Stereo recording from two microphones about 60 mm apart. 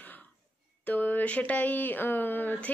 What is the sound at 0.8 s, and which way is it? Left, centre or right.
Speech, left.